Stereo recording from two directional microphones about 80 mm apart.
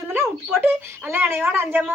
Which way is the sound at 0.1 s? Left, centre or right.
Right.